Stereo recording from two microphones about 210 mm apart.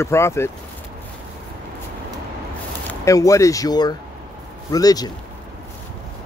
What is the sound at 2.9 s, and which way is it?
Speech, 15° left (ahead or behind).